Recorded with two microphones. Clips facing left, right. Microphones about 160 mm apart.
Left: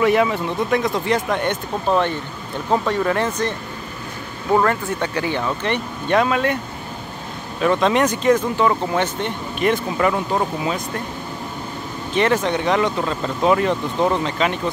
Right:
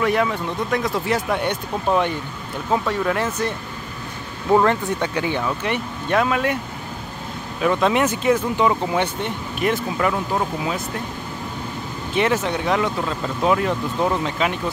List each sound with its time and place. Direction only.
0.0 s speech: 5° left (ahead or behind)
2.9 s speech: 5° right (ahead or behind)
4.6 s speech: 15° right (ahead or behind)
7.6 s speech: 5° right (ahead or behind)
12.2 s speech: 5° right (ahead or behind)